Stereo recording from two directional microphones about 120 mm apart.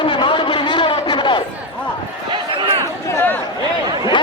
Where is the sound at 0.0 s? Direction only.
45° left (ahead or behind).